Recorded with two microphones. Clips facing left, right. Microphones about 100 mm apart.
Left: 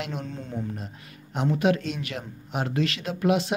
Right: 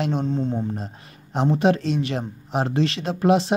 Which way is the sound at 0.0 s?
30° right (ahead or behind).